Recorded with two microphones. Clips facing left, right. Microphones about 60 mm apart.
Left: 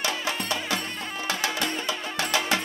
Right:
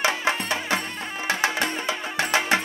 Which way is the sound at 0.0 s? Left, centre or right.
Right.